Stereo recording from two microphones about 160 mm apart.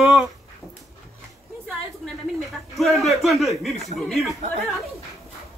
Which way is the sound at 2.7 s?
Centre (ahead or behind).